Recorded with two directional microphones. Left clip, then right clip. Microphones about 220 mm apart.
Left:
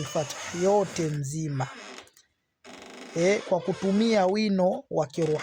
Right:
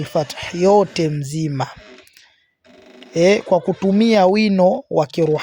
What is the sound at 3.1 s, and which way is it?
Speech, 35° right (ahead or behind).